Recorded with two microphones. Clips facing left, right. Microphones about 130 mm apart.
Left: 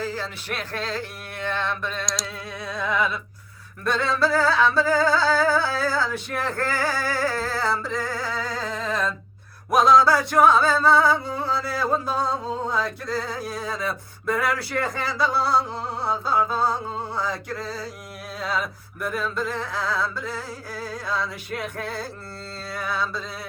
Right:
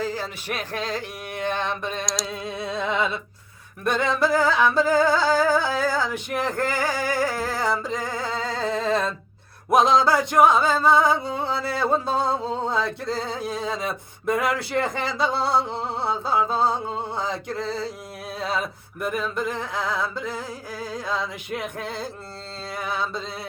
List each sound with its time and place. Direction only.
0.0 s a sound: 15° right (ahead or behind)
2.2 s music: 20° right (ahead or behind)
3.8 s singing: 20° right (ahead or behind)
9.6 s music: 20° right (ahead or behind)